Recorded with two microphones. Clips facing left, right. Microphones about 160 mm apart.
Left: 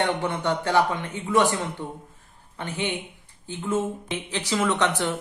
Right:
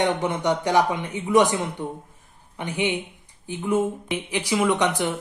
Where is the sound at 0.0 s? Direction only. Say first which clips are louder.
Right 2 dB; 20° right (ahead or behind).